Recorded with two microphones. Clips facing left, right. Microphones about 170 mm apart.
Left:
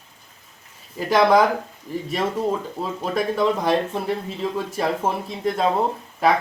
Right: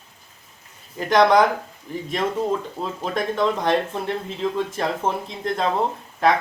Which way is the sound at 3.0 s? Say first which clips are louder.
Left 1 dB; 5° left (ahead or behind).